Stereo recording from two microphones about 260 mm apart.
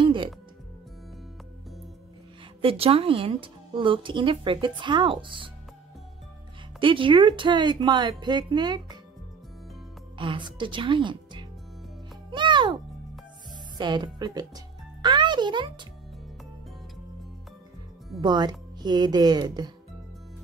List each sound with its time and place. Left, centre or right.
0.0 s music: centre
2.6 s speech: right
6.8 s speech: centre
10.1 s a woman's voice: centre
12.3 s music: centre
13.7 s a child's voice: centre
18.2 s speech: centre